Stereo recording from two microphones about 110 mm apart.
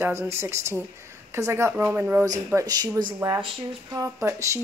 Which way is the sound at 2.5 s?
35° right (ahead or behind).